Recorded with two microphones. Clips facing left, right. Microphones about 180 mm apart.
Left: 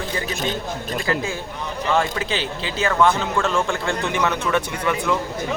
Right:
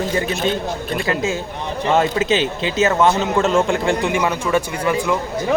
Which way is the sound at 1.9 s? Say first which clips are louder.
Right 5 dB; 25° right (ahead or behind).